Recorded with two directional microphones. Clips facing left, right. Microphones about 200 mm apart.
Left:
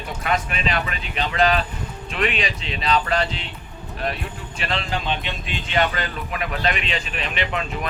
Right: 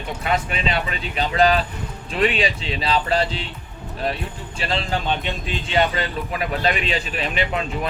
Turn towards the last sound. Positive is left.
turn(degrees=-35)  # may be behind; listen again after turning